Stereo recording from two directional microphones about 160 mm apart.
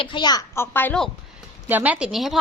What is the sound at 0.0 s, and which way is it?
A child's voice, 30° left (ahead or behind).